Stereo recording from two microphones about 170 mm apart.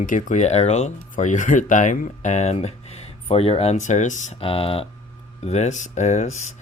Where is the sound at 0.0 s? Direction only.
50° left (ahead or behind).